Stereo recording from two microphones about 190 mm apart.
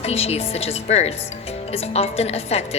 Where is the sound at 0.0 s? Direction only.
35° left (ahead or behind).